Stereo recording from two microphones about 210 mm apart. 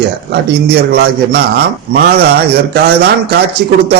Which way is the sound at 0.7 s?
50° right (ahead or behind).